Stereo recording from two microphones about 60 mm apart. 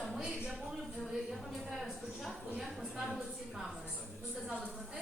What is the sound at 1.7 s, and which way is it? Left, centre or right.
A woman's voice, centre.